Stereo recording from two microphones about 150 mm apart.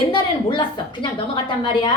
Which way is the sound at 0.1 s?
30° left (ahead or behind).